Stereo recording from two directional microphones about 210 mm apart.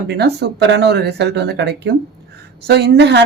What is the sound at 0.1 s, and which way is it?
Speech, 50° right (ahead or behind).